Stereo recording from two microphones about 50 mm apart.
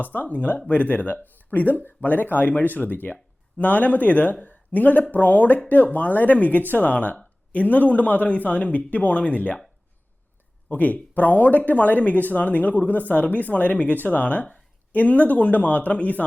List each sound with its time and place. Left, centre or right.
0.0 s speech: left
10.7 s speech: left